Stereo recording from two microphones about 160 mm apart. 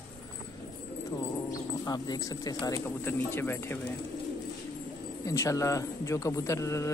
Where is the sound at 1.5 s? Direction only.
25° left (ahead or behind).